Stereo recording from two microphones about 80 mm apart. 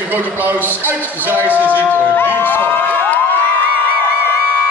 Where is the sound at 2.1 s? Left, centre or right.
Left.